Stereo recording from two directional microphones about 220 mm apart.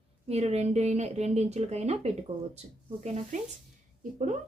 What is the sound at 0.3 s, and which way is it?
A woman's voice, 30° right (ahead or behind).